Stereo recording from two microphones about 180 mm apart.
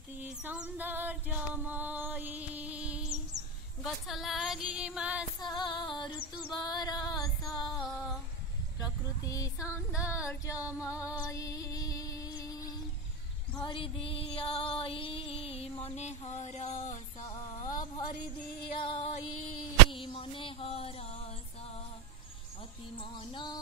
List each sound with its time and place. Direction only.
0.2 s female singing: 10° right (ahead or behind)
3.8 s a sound: centre (ahead or behind)
5.4 s female singing: 25° left (ahead or behind)
7.7 s a sound: centre (ahead or behind)
8.7 s female singing: 20° left (ahead or behind)
10.7 s female singing: 5° right (ahead or behind)
11.3 s music: 20° left (ahead or behind); by 17.0 s 40° left (ahead or behind)
18.8 s female singing: 30° left (ahead or behind)
19.9 s a sound: 30° left (ahead or behind)
22.9 s music: 25° left (ahead or behind)